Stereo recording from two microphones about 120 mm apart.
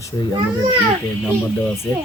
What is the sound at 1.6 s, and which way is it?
Speech, 20° left (ahead or behind).